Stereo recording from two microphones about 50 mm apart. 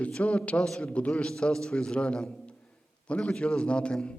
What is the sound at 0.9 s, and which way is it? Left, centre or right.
Speech, left.